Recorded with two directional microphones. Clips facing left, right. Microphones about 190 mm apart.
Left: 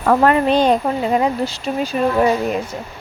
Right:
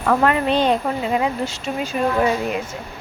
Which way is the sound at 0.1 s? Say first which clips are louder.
Left 4 dB; 40° left (ahead or behind).